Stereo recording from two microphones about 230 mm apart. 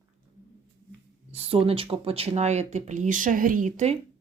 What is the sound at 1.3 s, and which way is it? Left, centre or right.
Speech, right.